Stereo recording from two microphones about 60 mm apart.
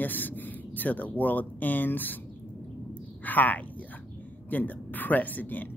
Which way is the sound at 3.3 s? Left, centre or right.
Left.